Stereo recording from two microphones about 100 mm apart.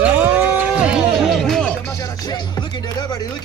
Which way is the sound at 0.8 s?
5° right (ahead or behind).